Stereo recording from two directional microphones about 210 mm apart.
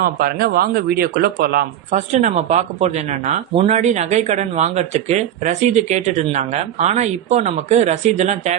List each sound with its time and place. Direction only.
0.0 s speech: 45° right (ahead or behind)